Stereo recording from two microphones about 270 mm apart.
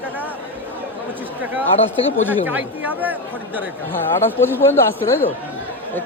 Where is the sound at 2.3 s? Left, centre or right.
Centre.